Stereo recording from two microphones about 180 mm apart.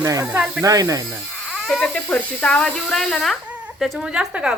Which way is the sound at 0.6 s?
20° right (ahead or behind).